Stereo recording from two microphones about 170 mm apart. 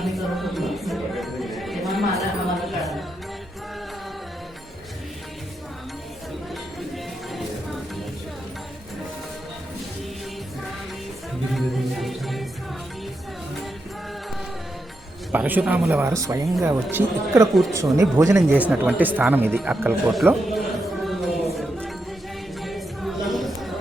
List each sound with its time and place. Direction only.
0.0 s music: centre (ahead or behind)
6.5 s music: centre (ahead or behind)
11.5 s music: centre (ahead or behind)
15.3 s speech: 10° right (ahead or behind)
17.5 s a woman's voice: centre (ahead or behind)
17.7 s speech: 20° right (ahead or behind)
18.5 s speech: 10° right (ahead or behind)
20.1 s music: centre (ahead or behind)